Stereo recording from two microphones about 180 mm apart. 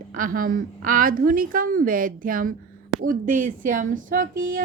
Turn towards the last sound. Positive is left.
turn(degrees=-50)  # may be behind; listen again after turning